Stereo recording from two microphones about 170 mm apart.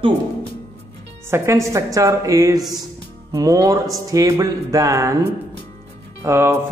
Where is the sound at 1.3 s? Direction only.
15° right (ahead or behind).